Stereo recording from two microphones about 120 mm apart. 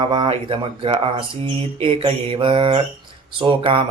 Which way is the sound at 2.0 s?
60° right (ahead or behind).